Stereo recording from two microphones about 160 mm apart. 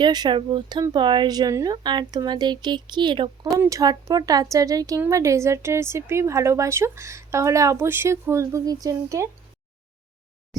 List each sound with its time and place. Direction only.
0.0 s speech: 25° right (ahead or behind)